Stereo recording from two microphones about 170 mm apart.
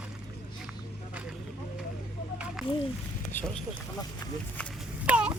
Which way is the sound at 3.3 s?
5° left (ahead or behind).